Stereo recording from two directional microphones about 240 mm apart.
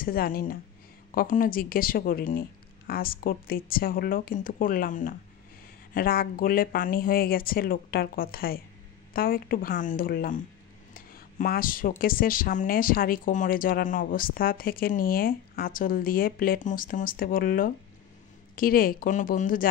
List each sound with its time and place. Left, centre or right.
0.0 s speech: left
10.9 s a sound: left
12.0 s speech: left